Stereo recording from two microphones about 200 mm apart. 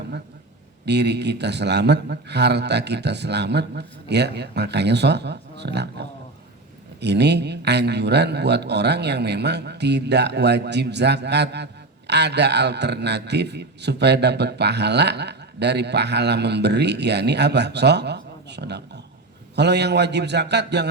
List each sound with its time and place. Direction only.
0.9 s a man's voice: 55° right (ahead or behind)